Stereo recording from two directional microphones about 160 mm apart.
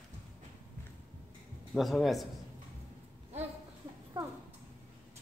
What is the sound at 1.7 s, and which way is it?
Speech, centre (ahead or behind).